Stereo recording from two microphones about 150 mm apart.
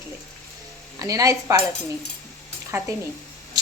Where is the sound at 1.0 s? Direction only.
20° right (ahead or behind).